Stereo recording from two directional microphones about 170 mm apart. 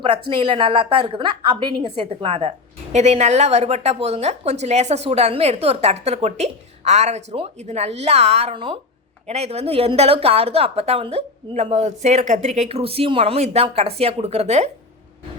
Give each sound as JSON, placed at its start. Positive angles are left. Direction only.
{"t": 0.0, "sound": "speech", "side_deg": -30}